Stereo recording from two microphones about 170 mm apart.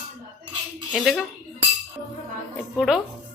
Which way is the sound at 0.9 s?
Centre (ahead or behind).